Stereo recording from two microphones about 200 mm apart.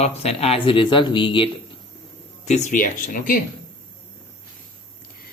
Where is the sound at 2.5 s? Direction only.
35° left (ahead or behind).